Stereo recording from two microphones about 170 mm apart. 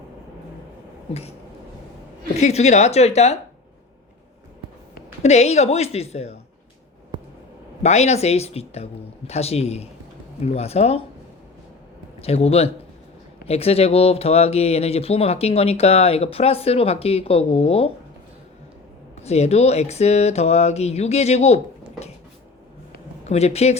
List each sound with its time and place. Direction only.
2.3 s speech: 40° left (ahead or behind)
5.2 s speech: 40° left (ahead or behind)
7.8 s speech: 40° left (ahead or behind)
12.2 s speech: 35° left (ahead or behind)
19.2 s speech: 40° left (ahead or behind)
23.2 s speech: 40° left (ahead or behind)